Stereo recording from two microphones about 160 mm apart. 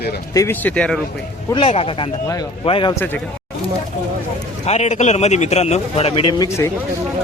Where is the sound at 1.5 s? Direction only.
35° left (ahead or behind).